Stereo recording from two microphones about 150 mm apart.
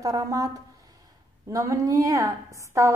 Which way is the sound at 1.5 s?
20° right (ahead or behind).